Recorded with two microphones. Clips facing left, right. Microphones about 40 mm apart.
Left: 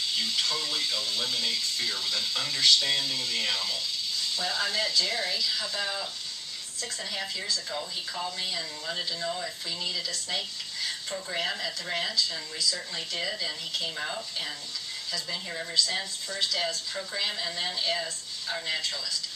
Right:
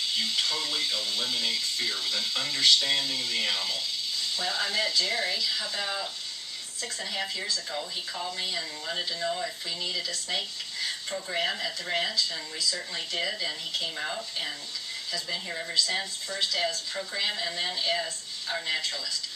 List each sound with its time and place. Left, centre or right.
0.1 s speech: centre